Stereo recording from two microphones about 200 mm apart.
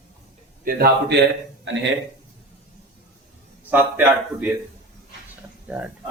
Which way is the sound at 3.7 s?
10° right (ahead or behind).